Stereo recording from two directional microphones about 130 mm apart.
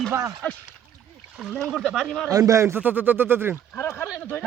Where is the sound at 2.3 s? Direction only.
25° right (ahead or behind).